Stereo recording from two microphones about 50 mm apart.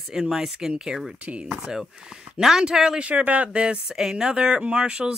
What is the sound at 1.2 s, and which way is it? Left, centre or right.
Speech, right.